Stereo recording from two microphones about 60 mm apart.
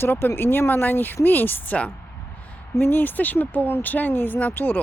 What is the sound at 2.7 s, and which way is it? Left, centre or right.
Speech, left.